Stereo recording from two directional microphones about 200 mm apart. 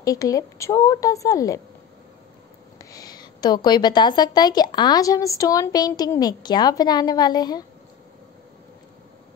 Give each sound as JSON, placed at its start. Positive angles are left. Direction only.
{"t": 0.0, "sound": "a woman's voice", "side_deg": 15}
{"t": 2.8, "sound": "a woman's voice", "side_deg": 20}